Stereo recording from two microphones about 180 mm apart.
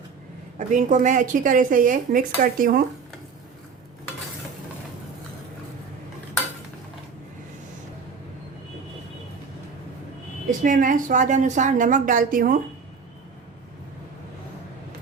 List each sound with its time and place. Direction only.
0.7 s speech: 45° right (ahead or behind)
10.6 s speech: 45° right (ahead or behind)